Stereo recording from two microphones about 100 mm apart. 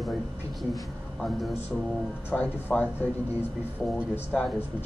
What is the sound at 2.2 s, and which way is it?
Speech, 15° left (ahead or behind).